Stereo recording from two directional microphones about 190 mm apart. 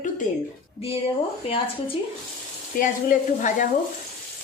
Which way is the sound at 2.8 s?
45° left (ahead or behind).